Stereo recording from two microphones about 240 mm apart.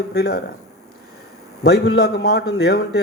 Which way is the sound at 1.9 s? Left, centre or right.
Left.